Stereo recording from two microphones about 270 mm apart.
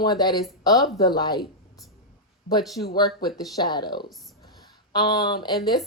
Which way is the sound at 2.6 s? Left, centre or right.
Centre.